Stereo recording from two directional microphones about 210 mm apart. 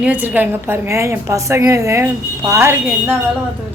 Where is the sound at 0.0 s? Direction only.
5° right (ahead or behind).